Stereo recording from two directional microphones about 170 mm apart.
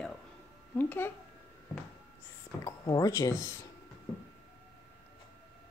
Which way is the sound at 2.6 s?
20° left (ahead or behind).